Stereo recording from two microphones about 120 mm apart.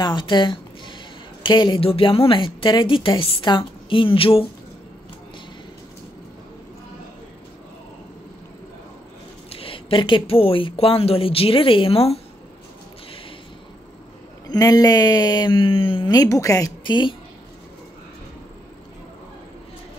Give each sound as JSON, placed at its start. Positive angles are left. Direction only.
{"t": 0.0, "sound": "a sound", "side_deg": 40}
{"t": 1.4, "sound": "speech", "side_deg": 40}
{"t": 1.9, "sound": "speech", "side_deg": 50}
{"t": 9.5, "sound": "speech", "side_deg": 50}
{"t": 14.5, "sound": "speech", "side_deg": 30}
{"t": 16.1, "sound": "a woman's voice", "side_deg": 30}
{"t": 16.8, "sound": "speech", "side_deg": 40}